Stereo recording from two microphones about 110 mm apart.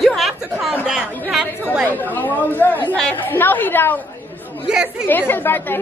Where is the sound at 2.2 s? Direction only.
15° left (ahead or behind).